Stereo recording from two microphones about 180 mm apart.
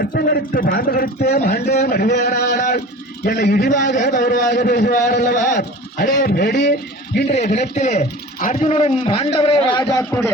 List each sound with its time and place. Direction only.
0.0 s a man's voice: 60° left (ahead or behind)
2.6 s a man's voice: 45° left (ahead or behind)
3.2 s a man's voice: 60° left (ahead or behind)
3.7 s a man's voice: 45° left (ahead or behind); by 6.7 s 65° left (ahead or behind)
7.8 s a man's voice: 40° left (ahead or behind); by 10.3 s 15° left (ahead or behind)